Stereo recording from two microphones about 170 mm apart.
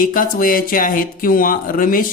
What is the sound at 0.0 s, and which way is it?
Speech, 55° left (ahead or behind).